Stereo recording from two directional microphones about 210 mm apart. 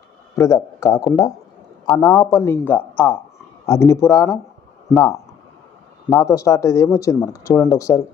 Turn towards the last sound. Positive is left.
turn(degrees=15)  # may be behind; listen again after turning